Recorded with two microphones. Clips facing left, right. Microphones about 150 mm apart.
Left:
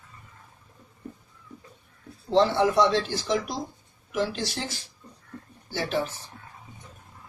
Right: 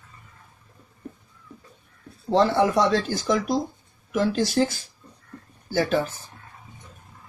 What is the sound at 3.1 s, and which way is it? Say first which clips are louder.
Speech: right 5 dB; 45° right (ahead or behind).